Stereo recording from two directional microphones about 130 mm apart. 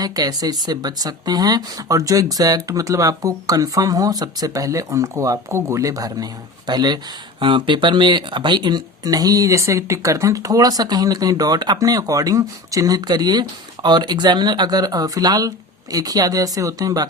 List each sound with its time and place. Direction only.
0.0 s speech: 30° right (ahead or behind)